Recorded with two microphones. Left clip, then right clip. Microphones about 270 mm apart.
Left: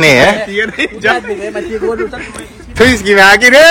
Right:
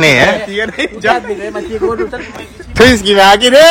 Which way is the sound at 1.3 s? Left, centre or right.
Centre.